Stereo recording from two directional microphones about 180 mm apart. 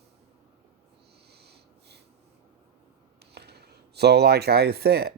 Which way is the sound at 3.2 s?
65° right (ahead or behind).